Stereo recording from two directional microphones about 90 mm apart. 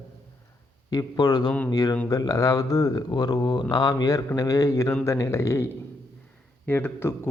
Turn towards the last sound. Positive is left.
turn(degrees=25)  # may be behind; listen again after turning